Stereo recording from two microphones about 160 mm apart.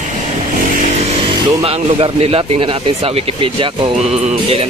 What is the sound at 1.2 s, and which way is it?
Speech, 35° right (ahead or behind).